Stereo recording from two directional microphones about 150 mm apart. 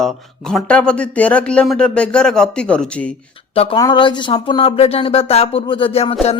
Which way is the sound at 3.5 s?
40° left (ahead or behind).